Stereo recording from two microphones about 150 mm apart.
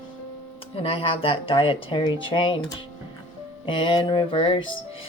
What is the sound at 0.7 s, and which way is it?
Speech, 40° left (ahead or behind).